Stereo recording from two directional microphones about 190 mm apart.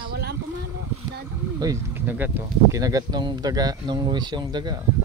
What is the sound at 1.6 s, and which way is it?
Speech, 15° right (ahead or behind).